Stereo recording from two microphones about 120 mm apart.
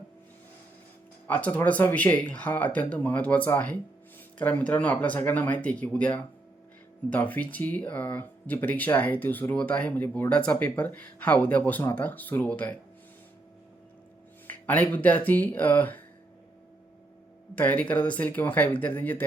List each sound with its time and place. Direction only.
1.3 s speech: 15° left (ahead or behind)
14.4 s speech: 15° left (ahead or behind)
17.5 s speech: 15° left (ahead or behind)